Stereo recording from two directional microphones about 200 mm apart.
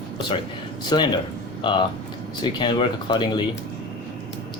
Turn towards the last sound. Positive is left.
turn(degrees=20)  # may be behind; listen again after turning